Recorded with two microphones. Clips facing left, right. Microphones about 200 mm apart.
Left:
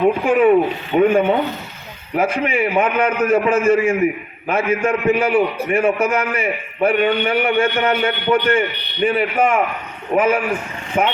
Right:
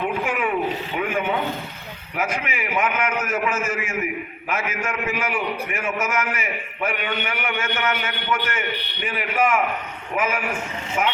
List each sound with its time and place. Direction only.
0.3 s a man's voice: 35° left (ahead or behind)